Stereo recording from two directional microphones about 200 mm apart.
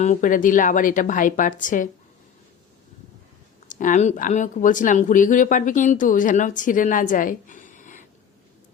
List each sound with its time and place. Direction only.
0.0 s speech: 40° left (ahead or behind)
3.7 s speech: 40° left (ahead or behind)